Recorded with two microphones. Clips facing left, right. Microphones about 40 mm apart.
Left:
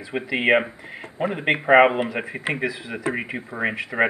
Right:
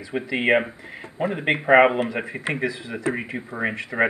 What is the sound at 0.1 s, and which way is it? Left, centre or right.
Speech, centre.